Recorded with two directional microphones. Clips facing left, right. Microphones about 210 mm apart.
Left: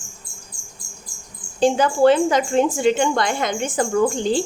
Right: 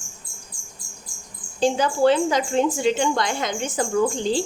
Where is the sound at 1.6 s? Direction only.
55° left (ahead or behind).